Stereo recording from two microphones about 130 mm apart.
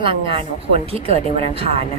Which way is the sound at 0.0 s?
40° right (ahead or behind).